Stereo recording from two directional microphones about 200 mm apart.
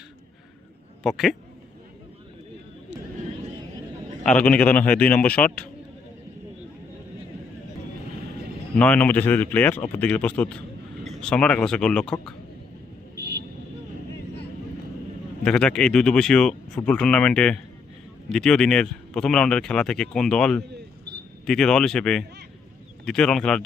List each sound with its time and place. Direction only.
1.0 s speech: centre (ahead or behind)
4.2 s speech: 5° left (ahead or behind)
8.7 s speech: 5° left (ahead or behind)
13.1 s vehicle: 55° right (ahead or behind)
15.4 s speech: 5° left (ahead or behind)